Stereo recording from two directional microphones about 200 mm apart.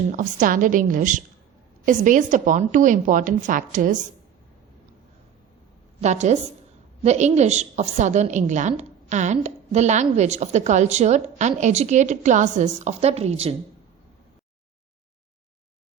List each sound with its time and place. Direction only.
0.1 s a woman's voice: 40° right (ahead or behind)
6.0 s a woman's voice: 35° right (ahead or behind)